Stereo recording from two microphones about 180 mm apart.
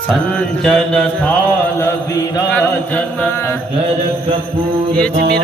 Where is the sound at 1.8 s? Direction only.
20° left (ahead or behind).